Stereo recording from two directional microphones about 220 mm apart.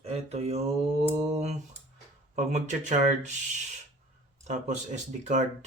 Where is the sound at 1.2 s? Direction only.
30° right (ahead or behind).